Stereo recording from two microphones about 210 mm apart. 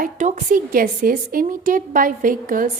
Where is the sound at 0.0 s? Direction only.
35° right (ahead or behind).